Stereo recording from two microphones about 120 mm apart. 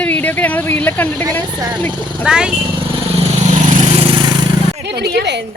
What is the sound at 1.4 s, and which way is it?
Speech, 30° right (ahead or behind).